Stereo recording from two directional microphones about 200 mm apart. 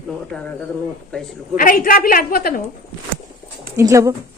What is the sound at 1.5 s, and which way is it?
A woman's voice, 45° left (ahead or behind).